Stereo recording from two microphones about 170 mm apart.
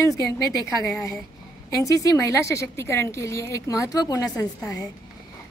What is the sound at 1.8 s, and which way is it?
A woman's voice, 20° left (ahead or behind).